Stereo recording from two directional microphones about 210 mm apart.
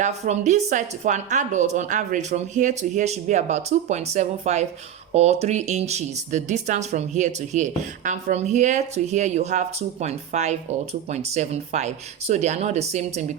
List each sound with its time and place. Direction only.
0.0 s speech: 35° right (ahead or behind)